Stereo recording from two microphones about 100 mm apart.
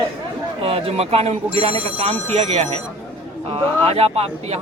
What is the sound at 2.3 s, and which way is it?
Speech, 90° right.